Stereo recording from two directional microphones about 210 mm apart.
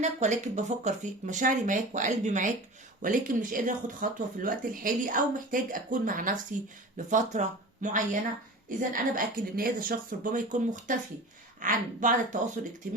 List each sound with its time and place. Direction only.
0.0 s speech: 35° right (ahead or behind)